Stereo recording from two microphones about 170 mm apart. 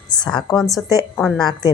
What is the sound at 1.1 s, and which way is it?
Speech, 5° left (ahead or behind).